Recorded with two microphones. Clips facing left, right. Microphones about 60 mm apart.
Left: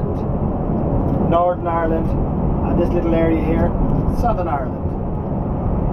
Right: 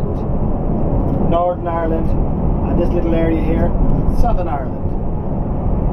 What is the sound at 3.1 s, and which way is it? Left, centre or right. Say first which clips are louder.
Speech: left 1 dB; centre.